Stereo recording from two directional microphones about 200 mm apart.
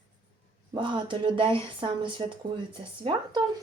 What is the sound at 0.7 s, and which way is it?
Speech, 25° right (ahead or behind).